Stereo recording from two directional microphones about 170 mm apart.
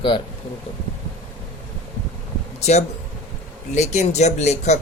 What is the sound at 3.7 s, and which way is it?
Speech, 45° left (ahead or behind).